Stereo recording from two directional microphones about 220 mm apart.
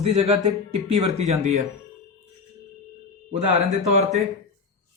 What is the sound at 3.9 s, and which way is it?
Speech, 30° right (ahead or behind).